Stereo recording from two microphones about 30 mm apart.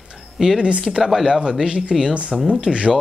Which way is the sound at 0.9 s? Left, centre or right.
Centre.